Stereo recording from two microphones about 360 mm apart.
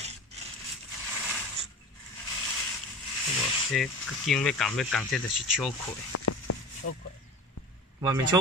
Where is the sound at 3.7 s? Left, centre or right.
Centre.